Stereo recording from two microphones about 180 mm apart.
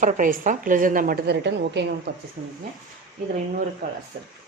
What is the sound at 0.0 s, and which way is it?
A woman's voice, 45° right (ahead or behind).